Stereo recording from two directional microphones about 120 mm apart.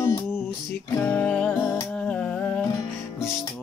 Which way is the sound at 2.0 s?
10° left (ahead or behind).